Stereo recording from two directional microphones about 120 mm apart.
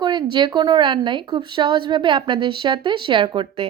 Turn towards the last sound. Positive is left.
turn(degrees=-45)  # may be behind; listen again after turning